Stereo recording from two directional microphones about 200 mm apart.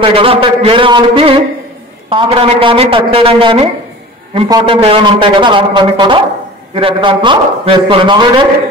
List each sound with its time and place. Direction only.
0.0 s a man's voice: 25° right (ahead or behind)